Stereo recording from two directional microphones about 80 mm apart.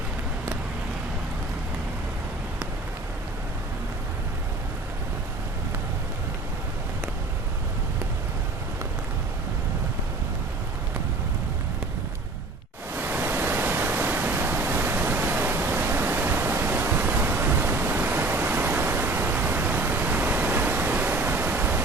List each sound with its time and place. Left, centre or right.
12.9 s pink noise: right